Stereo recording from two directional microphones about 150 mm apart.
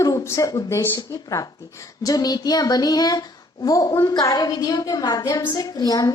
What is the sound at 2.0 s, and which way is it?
Speech, 25° left (ahead or behind).